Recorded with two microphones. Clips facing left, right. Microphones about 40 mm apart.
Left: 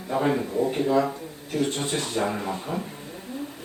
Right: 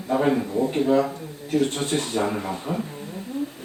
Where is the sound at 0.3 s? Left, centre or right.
Centre.